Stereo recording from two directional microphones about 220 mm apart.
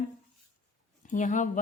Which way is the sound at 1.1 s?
35° left (ahead or behind).